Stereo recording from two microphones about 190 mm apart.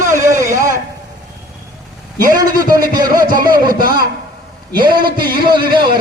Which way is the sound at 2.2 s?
20° right (ahead or behind).